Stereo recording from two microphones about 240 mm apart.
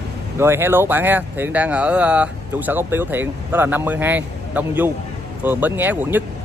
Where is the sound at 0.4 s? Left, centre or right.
Centre.